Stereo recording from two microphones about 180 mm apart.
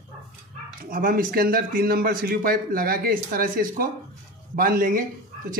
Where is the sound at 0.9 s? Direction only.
50° right (ahead or behind).